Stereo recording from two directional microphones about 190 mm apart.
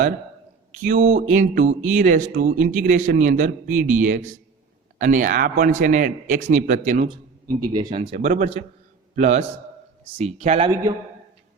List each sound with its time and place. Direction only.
0.7 s a man's voice: 40° right (ahead or behind)
7.9 s speech: 35° right (ahead or behind)